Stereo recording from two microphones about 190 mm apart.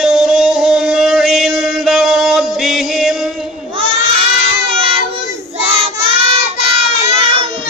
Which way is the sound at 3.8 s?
30° right (ahead or behind).